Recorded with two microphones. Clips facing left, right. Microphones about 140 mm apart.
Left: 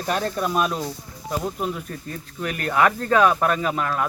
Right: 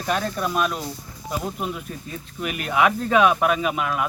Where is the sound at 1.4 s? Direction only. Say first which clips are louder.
Left 2 dB; 10° right (ahead or behind).